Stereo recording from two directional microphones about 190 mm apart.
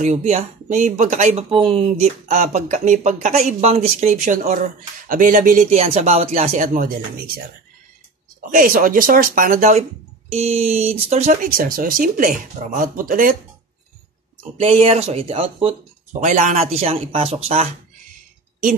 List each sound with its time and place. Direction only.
0.0 s speech: 40° right (ahead or behind)
1.5 s speech: 30° right (ahead or behind)
2.2 s speech: 40° right (ahead or behind)
14.6 s speech: 30° right (ahead or behind)